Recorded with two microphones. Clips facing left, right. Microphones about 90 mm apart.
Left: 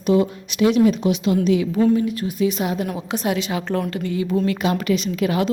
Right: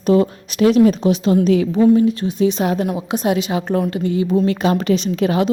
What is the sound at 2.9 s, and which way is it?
A woman's voice, 20° right (ahead or behind).